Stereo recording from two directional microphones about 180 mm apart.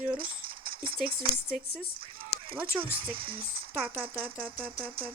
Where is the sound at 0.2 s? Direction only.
30° right (ahead or behind).